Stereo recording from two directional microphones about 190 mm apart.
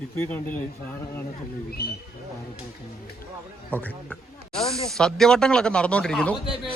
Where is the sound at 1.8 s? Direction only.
55° left (ahead or behind).